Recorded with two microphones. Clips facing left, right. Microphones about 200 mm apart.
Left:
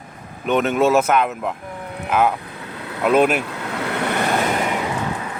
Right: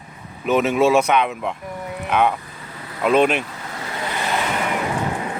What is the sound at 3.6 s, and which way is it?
Vehicle, 65° left (ahead or behind).